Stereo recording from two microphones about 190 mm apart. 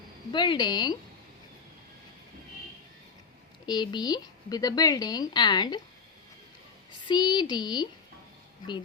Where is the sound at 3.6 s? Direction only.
20° left (ahead or behind).